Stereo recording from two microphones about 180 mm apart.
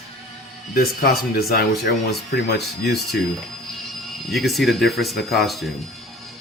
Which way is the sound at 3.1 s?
70° left (ahead or behind).